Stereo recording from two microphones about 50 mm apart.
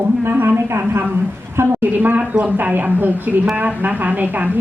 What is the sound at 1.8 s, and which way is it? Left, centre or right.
Speech, right.